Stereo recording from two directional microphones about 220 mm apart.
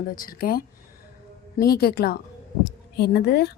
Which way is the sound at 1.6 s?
45° left (ahead or behind).